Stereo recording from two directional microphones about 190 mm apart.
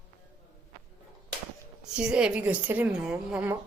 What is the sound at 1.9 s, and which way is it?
A woman's voice, 5° right (ahead or behind).